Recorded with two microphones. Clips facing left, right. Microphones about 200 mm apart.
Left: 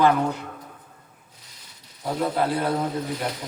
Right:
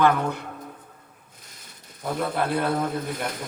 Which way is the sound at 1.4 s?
50° right (ahead or behind).